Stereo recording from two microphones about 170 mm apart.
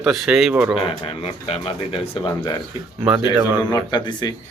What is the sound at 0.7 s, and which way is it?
A man's voice, 35° left (ahead or behind).